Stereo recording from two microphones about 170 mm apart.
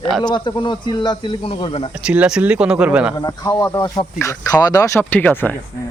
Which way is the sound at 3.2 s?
20° left (ahead or behind).